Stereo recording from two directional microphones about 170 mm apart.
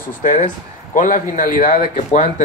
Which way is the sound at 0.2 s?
50° left (ahead or behind).